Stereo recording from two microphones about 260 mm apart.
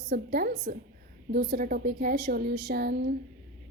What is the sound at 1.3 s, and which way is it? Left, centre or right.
A woman's voice, right.